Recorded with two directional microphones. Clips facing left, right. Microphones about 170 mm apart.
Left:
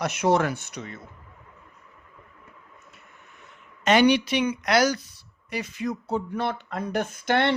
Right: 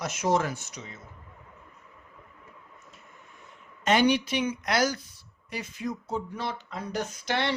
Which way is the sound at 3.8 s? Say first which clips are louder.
Left 4 dB; 80° left.